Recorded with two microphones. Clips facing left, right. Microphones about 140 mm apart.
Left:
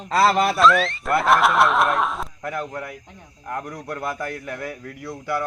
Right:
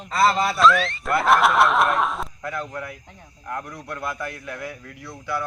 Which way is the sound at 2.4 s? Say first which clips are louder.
Left 2 dB; 15° left (ahead or behind).